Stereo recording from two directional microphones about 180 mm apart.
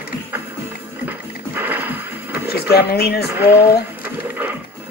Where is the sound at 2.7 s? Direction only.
65° left (ahead or behind).